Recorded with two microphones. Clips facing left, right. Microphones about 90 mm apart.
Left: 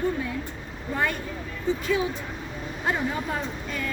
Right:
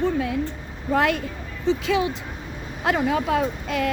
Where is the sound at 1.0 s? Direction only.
90° right.